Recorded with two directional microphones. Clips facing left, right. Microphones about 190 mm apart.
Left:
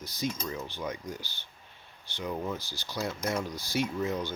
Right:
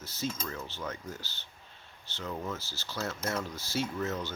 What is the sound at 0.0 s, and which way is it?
Speech, 15° left (ahead or behind).